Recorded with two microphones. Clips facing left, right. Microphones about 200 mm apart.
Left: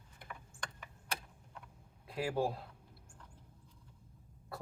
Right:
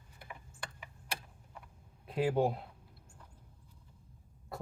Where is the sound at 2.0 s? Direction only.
20° right (ahead or behind).